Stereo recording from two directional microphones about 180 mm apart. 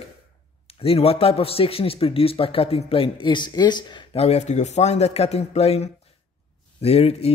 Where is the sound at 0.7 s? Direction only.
35° left (ahead or behind).